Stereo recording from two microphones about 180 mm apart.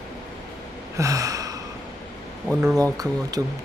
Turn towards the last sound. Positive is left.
turn(degrees=-20)  # may be behind; listen again after turning